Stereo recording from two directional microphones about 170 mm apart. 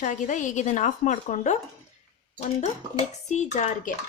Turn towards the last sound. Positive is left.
turn(degrees=45)  # may be behind; listen again after turning